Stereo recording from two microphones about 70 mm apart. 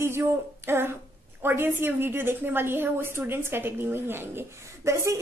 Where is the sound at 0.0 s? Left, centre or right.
Right.